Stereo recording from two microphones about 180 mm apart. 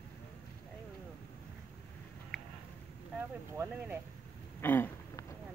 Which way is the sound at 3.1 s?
10° right (ahead or behind).